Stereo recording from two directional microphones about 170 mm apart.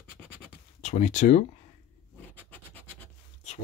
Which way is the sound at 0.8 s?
45° left (ahead or behind).